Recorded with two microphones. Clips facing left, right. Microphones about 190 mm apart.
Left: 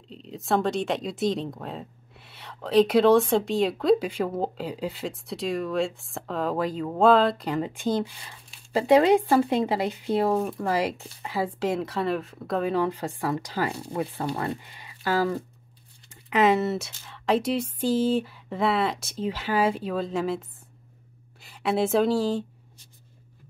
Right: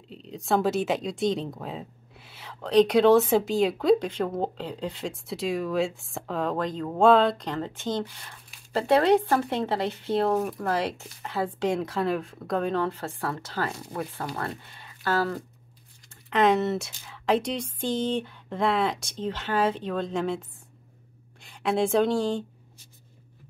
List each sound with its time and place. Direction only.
0.1 s speech: centre (ahead or behind)
12.8 s speech: 15° left (ahead or behind)